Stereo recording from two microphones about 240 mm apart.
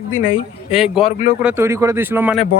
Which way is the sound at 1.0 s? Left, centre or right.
Left.